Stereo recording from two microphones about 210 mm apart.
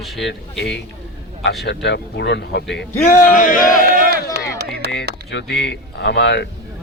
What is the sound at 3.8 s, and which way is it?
Speech, 40° right (ahead or behind).